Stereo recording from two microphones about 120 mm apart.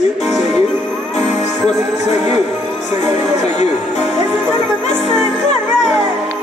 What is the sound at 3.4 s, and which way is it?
Speech, 70° left (ahead or behind).